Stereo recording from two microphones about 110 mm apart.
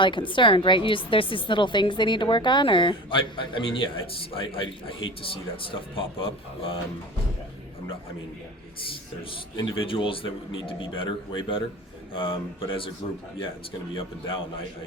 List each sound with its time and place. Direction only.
0.0 s a woman's voice: 50° left (ahead or behind)
9.6 s a woman's voice: 50° left (ahead or behind)